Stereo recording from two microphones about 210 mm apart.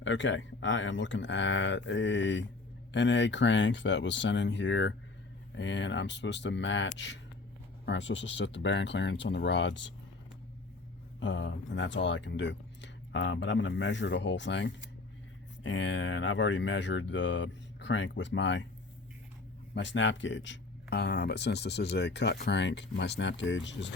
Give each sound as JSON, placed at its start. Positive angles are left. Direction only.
{"t": 0.0, "sound": "speech", "side_deg": 60}
{"t": 11.2, "sound": "speech", "side_deg": 60}
{"t": 19.7, "sound": "speech", "side_deg": 60}